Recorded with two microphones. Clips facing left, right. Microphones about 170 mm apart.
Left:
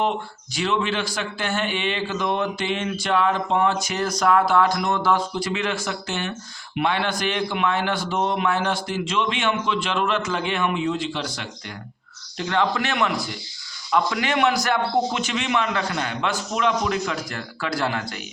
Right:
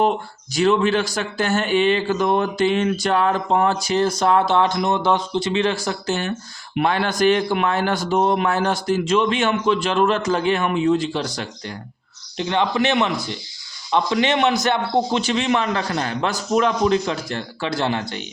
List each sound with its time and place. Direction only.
0.5 s speech: 45° right (ahead or behind)
12.4 s a man's voice: 20° right (ahead or behind)